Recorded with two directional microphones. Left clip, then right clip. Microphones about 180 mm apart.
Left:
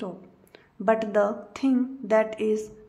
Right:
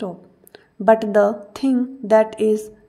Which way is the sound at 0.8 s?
25° right (ahead or behind).